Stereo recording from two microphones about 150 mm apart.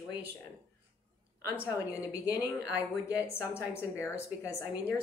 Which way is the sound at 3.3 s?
15° left (ahead or behind).